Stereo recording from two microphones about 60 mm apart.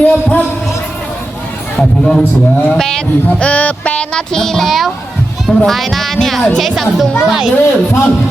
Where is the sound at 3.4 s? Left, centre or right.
Left.